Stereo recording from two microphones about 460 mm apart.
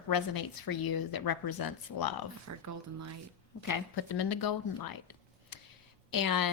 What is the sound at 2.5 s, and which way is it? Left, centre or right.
Speech, right.